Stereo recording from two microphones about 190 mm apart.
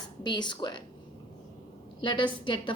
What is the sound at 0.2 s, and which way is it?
Speech, 25° left (ahead or behind).